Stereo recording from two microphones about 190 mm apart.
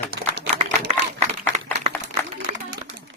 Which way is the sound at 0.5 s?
35° right (ahead or behind).